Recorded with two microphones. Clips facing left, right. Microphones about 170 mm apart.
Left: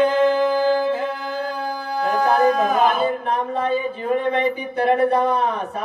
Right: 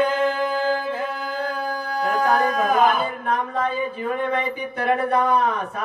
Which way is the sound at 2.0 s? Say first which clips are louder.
Left 3 dB; 30° left (ahead or behind).